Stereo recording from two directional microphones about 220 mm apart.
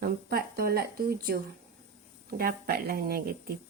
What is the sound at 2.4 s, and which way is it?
Speech, 45° right (ahead or behind).